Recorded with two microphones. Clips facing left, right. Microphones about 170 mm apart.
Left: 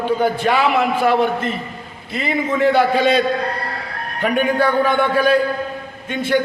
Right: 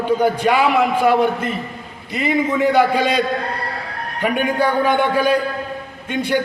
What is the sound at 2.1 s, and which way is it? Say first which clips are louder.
A man's voice: right 2 dB; 15° right (ahead or behind).